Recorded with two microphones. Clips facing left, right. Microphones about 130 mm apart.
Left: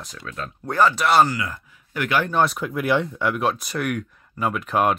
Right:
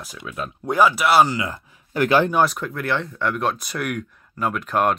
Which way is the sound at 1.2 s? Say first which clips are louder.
Right 2 dB; 25° right (ahead or behind).